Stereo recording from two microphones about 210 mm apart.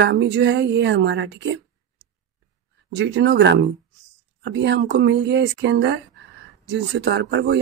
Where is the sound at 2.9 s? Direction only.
55° right (ahead or behind).